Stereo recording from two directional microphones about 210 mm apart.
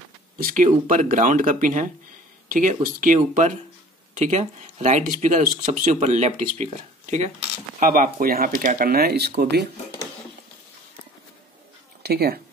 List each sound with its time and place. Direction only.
0.4 s speech: 40° right (ahead or behind)
12.0 s speech: 50° right (ahead or behind)